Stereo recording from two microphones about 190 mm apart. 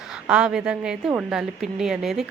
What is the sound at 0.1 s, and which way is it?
A woman's voice, 5° right (ahead or behind).